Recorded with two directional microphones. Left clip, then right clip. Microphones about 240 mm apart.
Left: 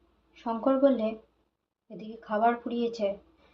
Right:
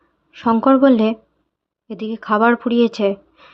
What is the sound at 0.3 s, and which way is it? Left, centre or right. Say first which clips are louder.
A woman's voice: right 13 dB; right.